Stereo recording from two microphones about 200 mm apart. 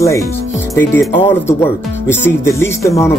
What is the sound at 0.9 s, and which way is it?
Speech, 10° left (ahead or behind).